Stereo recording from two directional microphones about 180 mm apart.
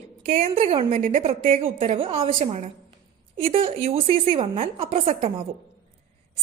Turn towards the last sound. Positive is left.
turn(degrees=-35)  # may be behind; listen again after turning